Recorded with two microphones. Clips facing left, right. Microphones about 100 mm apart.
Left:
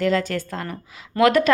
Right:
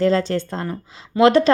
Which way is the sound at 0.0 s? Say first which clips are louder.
Right 3 dB; 30° right (ahead or behind).